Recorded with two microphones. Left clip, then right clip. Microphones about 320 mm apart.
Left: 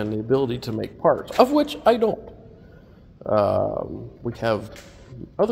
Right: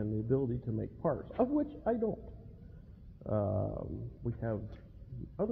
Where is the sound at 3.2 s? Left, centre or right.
Centre.